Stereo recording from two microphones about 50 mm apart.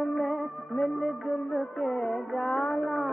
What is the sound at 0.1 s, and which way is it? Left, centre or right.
Music, centre.